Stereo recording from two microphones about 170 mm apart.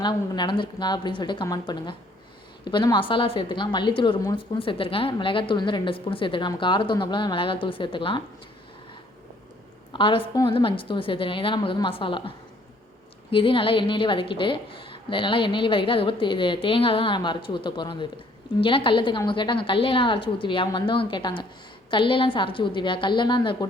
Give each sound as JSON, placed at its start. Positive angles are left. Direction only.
{"t": 0.0, "sound": "a woman's voice", "side_deg": 25}
{"t": 9.9, "sound": "a woman's voice", "side_deg": 30}
{"t": 13.3, "sound": "a woman's voice", "side_deg": 30}